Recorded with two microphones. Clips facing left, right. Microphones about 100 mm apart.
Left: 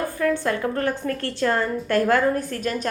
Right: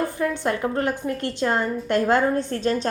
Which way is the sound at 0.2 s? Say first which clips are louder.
Left 5 dB; 20° right (ahead or behind).